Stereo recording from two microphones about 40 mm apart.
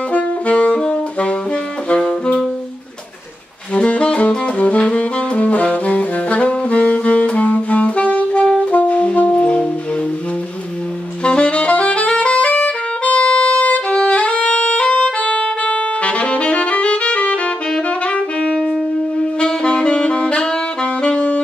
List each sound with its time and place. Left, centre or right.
0.1 s saxophone: left
0.7 s saxophone: left
3.7 s saxophone: left
8.7 s brass instrument: left
11.2 s music: left
18.5 s saxophone: centre